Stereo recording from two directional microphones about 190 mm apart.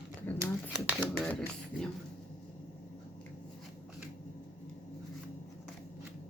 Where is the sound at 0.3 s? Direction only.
10° left (ahead or behind).